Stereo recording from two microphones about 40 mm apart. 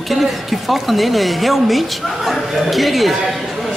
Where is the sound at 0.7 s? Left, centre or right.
Centre.